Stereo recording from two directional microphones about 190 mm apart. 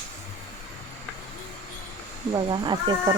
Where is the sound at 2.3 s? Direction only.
25° right (ahead or behind).